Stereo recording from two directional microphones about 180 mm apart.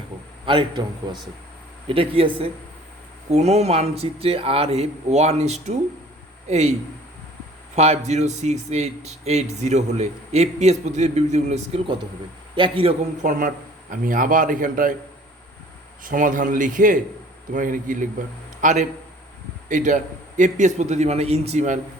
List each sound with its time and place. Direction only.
0.4 s a man's voice: 25° right (ahead or behind)
7.8 s a man's voice: 35° right (ahead or behind)
14.0 s a man's voice: 50° right (ahead or behind)
16.0 s a man's voice: 45° right (ahead or behind)